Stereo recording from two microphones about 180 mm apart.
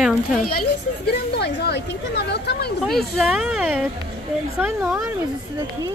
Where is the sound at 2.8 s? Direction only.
Centre (ahead or behind).